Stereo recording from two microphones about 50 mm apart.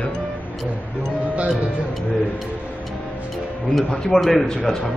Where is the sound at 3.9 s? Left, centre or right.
Centre.